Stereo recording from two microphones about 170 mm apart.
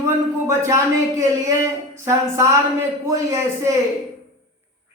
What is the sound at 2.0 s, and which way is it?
Speech, 15° right (ahead or behind).